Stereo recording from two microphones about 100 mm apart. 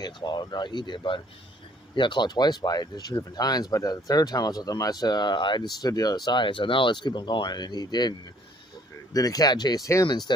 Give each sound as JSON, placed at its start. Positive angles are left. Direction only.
{"t": 0.0, "sound": "speech", "side_deg": 45}
{"t": 9.1, "sound": "speech", "side_deg": 40}
{"t": 10.0, "sound": "speech", "side_deg": 45}